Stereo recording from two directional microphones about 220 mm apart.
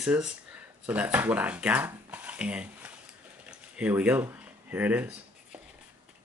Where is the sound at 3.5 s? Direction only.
5° right (ahead or behind).